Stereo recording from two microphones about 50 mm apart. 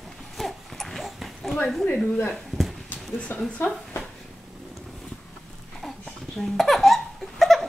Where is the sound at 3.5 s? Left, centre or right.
Left.